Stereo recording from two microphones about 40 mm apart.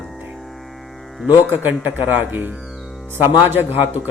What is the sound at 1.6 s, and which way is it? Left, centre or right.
Speech, right.